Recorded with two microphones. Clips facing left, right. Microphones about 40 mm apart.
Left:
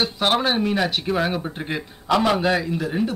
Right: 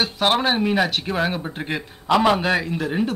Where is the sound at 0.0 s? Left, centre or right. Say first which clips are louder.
Right 1 dB; centre.